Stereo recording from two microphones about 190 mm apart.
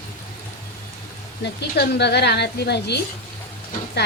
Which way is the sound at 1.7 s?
60° left (ahead or behind).